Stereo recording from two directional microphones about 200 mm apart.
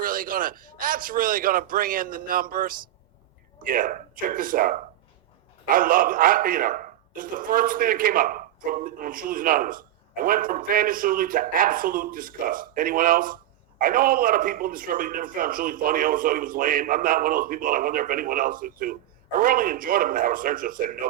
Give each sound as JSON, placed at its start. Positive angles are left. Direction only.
{"t": 0.0, "sound": "a man's voice", "side_deg": -45}